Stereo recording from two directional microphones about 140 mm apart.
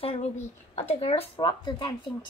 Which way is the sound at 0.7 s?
50° left (ahead or behind).